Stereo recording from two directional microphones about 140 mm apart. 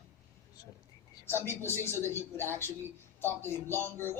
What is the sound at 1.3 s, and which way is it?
Speech, 15° left (ahead or behind).